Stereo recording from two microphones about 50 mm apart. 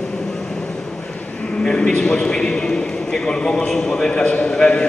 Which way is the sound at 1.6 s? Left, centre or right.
Centre.